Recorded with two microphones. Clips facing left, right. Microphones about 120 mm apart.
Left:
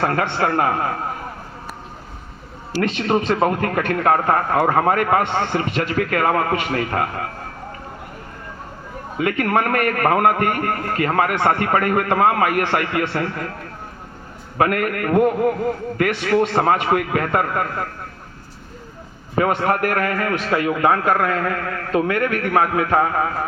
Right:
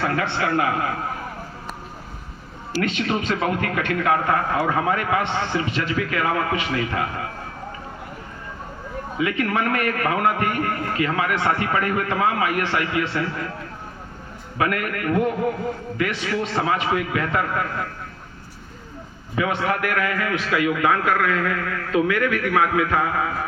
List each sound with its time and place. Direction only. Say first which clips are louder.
0.0 s speech: left 3 dB; 45° left (ahead or behind)
2.7 s speech: left 4 dB; 35° left (ahead or behind)
9.1 s speech: left 4 dB; 50° left (ahead or behind)
14.6 s speech: left 4 dB; 45° left (ahead or behind)
19.4 s a man's voice: left 4 dB; 45° left (ahead or behind)